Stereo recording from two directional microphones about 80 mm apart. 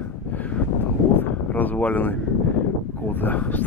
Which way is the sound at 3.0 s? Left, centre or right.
Left.